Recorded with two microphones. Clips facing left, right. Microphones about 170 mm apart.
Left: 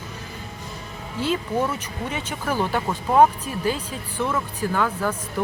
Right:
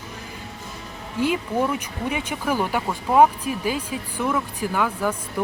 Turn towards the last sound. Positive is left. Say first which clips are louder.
# even
turn(degrees=-10)  # may be behind; listen again after turning